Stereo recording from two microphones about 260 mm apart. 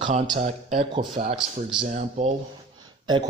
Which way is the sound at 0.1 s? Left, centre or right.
Right.